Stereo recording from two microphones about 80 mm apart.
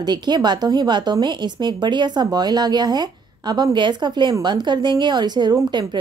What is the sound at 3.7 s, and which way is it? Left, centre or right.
A woman's voice, right.